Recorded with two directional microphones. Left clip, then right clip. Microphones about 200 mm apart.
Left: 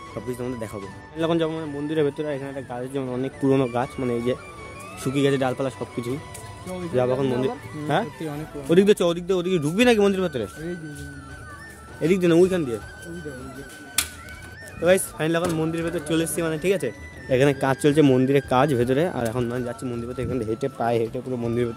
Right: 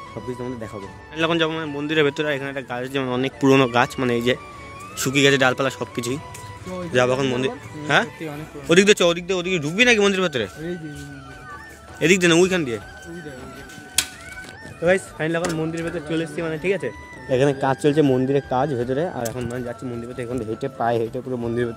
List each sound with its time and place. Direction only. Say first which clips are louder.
0.4 s speech: even; centre (ahead or behind)
1.1 s speech: right 3 dB; 15° left (ahead or behind)
7.0 s speech: right 3 dB; 5° left (ahead or behind)
9.3 s speech: even; 35° left (ahead or behind); by 10.5 s 10° left (ahead or behind)
12.0 s speech: right 2 dB; 5° left (ahead or behind)
14.8 s speech: even; 10° left (ahead or behind)
19.5 s speech: even; 10° left (ahead or behind)